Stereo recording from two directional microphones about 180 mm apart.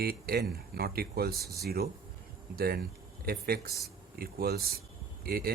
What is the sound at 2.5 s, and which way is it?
Speech, 55° right (ahead or behind).